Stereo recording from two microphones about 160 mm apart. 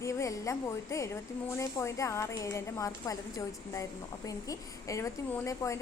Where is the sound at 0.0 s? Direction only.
20° left (ahead or behind).